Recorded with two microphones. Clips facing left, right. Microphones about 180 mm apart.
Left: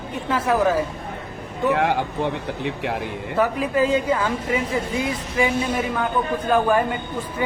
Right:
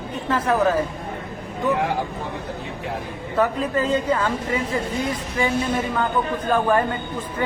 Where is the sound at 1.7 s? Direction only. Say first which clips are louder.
Left 3 dB; 70° left (ahead or behind).